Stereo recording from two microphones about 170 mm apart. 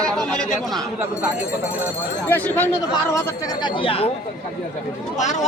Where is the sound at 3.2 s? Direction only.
20° left (ahead or behind).